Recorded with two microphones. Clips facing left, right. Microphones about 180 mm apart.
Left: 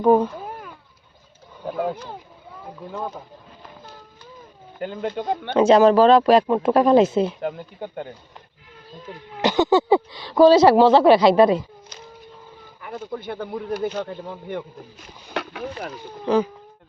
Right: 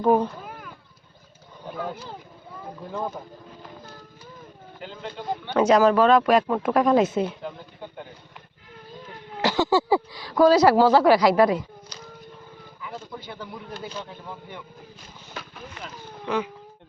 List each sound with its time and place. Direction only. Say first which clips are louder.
0.0 s a child's voice: left 4 dB; 15° left (ahead or behind)
4.8 s speech: left 9 dB; 55° left (ahead or behind)
5.5 s speech: left 4 dB; 25° left (ahead or behind)
7.4 s speech: left 7 dB; 65° left (ahead or behind)
9.4 s speech: left 4 dB; 20° left (ahead or behind)
12.8 s speech: left 6 dB; 55° left (ahead or behind)
15.3 s boat: left 11 dB; 75° left (ahead or behind)
16.2 s speech: left 7 dB; 35° left (ahead or behind)